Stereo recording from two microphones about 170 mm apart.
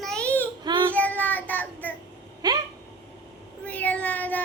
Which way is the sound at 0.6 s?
30° right (ahead or behind).